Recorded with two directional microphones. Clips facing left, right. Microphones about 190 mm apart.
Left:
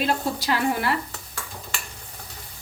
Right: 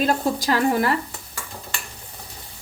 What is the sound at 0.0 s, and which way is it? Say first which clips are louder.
Speech: right 4 dB; 45° right (ahead or behind).